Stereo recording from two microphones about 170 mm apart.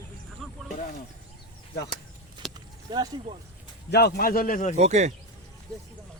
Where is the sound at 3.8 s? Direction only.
75° left (ahead or behind); by 4.7 s 55° left (ahead or behind).